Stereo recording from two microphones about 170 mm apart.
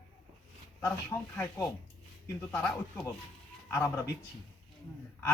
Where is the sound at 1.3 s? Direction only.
5° left (ahead or behind).